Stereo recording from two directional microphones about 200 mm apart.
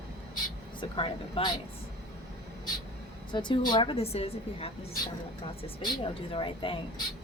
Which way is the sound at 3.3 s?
25° left (ahead or behind).